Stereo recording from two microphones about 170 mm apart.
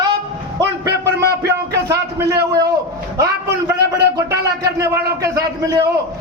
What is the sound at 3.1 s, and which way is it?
Speech, 15° right (ahead or behind).